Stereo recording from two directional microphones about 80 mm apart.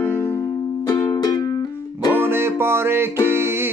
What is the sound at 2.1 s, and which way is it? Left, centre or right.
Music, right.